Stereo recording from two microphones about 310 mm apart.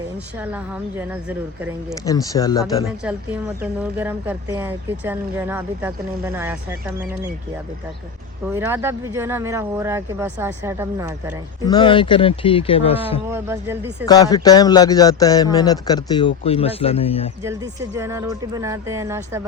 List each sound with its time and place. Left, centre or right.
0.3 s a woman's voice: centre
2.0 s speech: centre
3.0 s speech: centre
8.5 s speech: centre
11.6 s speech: centre
13.3 s speech: centre
14.0 s speech: centre
17.4 s speech: centre